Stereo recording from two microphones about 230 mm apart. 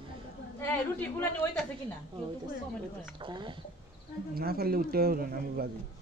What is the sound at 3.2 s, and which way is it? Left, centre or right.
Speech, right.